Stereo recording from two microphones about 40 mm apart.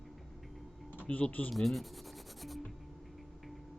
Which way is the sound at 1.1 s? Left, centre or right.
Left.